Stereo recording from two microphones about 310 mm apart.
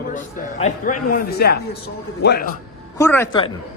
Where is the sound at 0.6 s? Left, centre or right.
Left.